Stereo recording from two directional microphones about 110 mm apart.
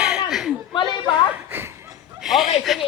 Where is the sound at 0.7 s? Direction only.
50° left (ahead or behind).